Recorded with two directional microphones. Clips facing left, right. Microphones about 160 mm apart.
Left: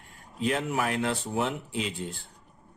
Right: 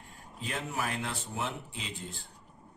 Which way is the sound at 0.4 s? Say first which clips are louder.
Left 8 dB; 65° left (ahead or behind).